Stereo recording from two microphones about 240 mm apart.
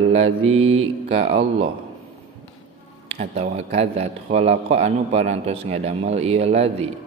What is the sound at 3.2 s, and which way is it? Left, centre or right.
Speech, right.